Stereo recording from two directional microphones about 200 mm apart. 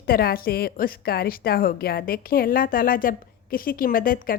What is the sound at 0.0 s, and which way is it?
A woman's voice, 50° left (ahead or behind).